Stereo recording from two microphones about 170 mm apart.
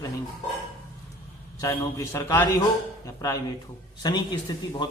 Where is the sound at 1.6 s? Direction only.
15° left (ahead or behind).